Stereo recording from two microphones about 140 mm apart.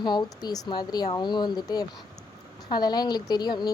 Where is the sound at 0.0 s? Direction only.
30° left (ahead or behind).